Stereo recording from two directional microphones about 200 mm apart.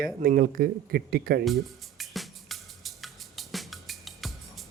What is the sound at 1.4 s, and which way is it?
Music, centre (ahead or behind).